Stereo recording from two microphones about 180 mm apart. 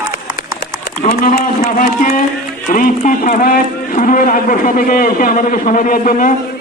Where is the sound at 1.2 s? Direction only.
55° left (ahead or behind).